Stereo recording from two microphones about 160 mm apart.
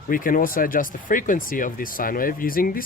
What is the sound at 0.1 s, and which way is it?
Speech, 60° left (ahead or behind).